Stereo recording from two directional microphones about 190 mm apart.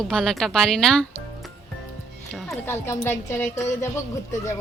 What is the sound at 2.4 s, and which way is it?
Speech, 10° left (ahead or behind).